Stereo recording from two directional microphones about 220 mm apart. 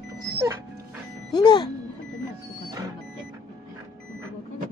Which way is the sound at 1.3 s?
20° left (ahead or behind).